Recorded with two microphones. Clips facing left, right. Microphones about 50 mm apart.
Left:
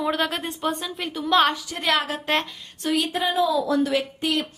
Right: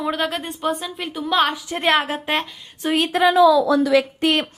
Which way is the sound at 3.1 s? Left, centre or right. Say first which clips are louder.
Right 13 dB; right.